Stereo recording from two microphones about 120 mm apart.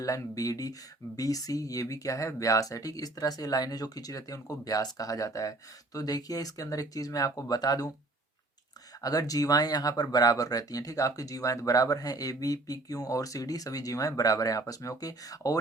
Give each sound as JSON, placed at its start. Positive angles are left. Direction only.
{"t": 0.0, "sound": "speech", "side_deg": 25}
{"t": 9.0, "sound": "speech", "side_deg": 30}